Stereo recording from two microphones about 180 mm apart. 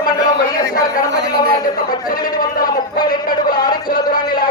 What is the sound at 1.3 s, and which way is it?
A man's voice, 55° left (ahead or behind).